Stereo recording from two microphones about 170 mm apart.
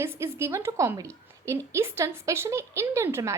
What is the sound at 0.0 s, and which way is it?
A woman's voice, 15° right (ahead or behind).